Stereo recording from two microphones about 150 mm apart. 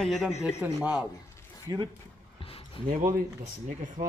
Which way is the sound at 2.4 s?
40° left (ahead or behind).